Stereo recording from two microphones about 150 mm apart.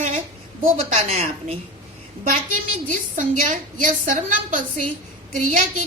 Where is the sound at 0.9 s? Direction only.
40° right (ahead or behind).